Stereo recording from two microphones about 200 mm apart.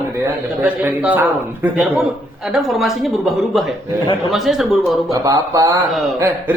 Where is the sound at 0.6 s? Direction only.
10° right (ahead or behind).